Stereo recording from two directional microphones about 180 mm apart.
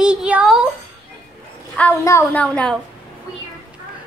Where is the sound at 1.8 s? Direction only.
10° left (ahead or behind).